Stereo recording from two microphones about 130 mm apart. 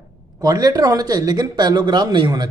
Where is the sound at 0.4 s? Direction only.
30° right (ahead or behind).